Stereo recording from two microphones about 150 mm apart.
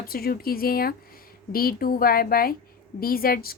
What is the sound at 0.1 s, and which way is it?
A woman's voice, 85° left.